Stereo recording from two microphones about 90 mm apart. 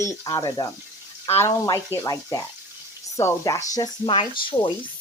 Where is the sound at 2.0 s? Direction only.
45° left (ahead or behind).